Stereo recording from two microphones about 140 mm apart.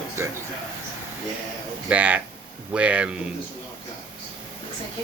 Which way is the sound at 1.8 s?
10° right (ahead or behind).